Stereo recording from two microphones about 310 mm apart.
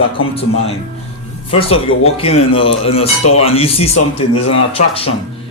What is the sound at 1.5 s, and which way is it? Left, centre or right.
Speech, centre.